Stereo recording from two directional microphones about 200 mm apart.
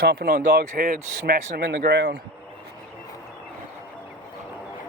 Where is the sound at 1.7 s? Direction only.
50° right (ahead or behind).